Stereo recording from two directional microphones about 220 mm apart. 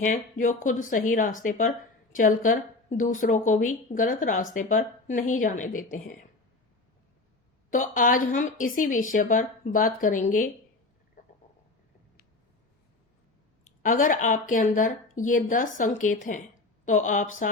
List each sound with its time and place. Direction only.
0.0 s speech: 35° left (ahead or behind)
7.7 s speech: 35° left (ahead or behind)
11.2 s stomach rumble: 40° left (ahead or behind)
13.8 s speech: 35° left (ahead or behind)